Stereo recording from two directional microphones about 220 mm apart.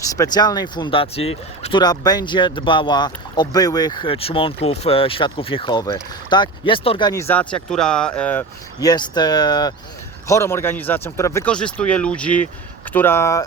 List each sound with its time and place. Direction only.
0.2 s speech: 20° left (ahead or behind)